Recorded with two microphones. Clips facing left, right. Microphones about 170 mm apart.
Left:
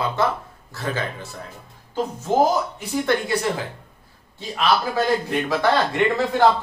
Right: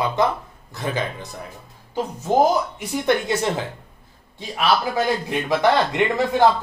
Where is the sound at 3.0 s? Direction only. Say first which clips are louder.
Right 2 dB; 20° right (ahead or behind).